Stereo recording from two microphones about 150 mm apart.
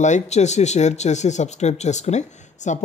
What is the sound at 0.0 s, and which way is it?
Speech, 50° left (ahead or behind).